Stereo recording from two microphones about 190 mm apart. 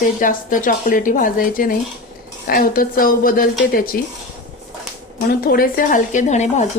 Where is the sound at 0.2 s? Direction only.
45° left (ahead or behind).